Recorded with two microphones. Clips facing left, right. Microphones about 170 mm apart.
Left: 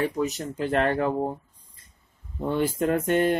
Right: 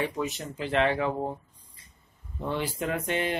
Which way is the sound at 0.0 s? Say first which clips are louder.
Left 4 dB; 40° left (ahead or behind).